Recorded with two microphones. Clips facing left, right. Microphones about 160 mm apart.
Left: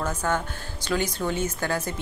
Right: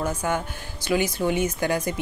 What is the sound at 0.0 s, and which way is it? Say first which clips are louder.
Speech: right 1 dB; 10° right (ahead or behind).